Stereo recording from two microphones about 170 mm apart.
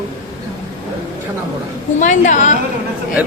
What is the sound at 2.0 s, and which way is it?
Speech, 45° left (ahead or behind).